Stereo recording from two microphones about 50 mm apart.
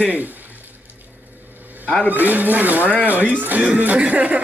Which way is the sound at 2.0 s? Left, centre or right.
Right.